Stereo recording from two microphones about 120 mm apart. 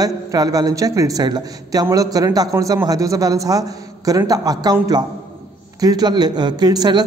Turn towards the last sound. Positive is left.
turn(degrees=-35)  # may be behind; listen again after turning